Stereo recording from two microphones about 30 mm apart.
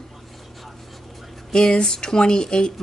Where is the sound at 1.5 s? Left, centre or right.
Left.